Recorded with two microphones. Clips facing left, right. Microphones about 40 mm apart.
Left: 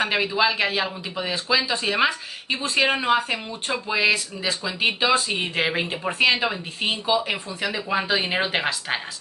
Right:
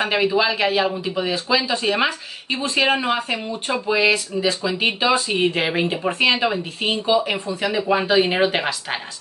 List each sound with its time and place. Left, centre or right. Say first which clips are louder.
0.0 s speech: right 3 dB; centre